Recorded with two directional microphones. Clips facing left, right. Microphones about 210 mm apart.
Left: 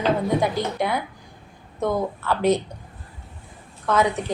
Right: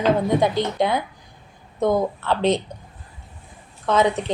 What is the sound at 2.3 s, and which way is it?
Speech, 20° right (ahead or behind).